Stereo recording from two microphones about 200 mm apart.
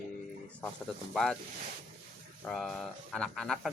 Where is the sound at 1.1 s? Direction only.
Centre (ahead or behind).